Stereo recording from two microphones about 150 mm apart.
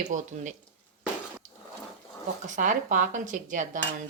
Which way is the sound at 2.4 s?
60° right (ahead or behind).